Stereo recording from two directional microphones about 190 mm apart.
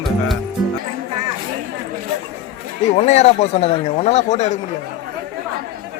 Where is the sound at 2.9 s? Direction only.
35° left (ahead or behind).